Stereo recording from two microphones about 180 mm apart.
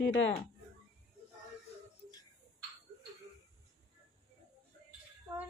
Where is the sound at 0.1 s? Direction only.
30° left (ahead or behind).